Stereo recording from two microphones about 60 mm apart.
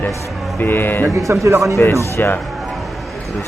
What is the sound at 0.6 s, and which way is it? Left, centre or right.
Speech, left.